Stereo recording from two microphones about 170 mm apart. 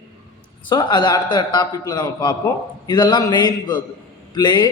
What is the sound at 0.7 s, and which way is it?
A man's voice, 25° left (ahead or behind).